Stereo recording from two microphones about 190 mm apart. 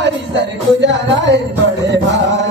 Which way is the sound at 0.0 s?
65° right (ahead or behind).